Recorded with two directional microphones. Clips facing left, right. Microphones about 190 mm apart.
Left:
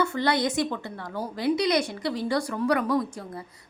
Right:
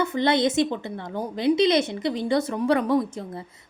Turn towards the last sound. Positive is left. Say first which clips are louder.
# right 3 dB
turn(degrees=-25)  # may be behind; listen again after turning